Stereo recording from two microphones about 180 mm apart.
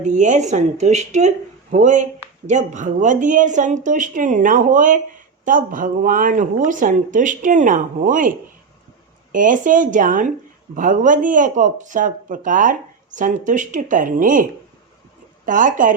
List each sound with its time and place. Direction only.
0.0 s speech: 40° right (ahead or behind)
9.3 s speech: 45° right (ahead or behind)
15.4 s speech: 45° right (ahead or behind)